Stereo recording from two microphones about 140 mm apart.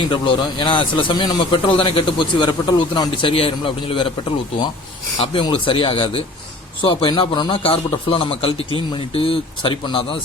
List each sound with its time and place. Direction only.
0.1 s speech: 35° left (ahead or behind)